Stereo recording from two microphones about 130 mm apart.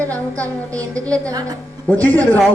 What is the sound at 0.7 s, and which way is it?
Speech, 25° right (ahead or behind).